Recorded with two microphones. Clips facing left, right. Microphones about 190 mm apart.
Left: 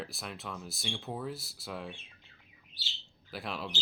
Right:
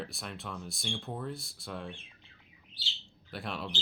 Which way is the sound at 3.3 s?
Centre (ahead or behind).